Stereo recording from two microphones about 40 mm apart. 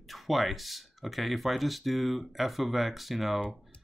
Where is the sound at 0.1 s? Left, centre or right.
Centre.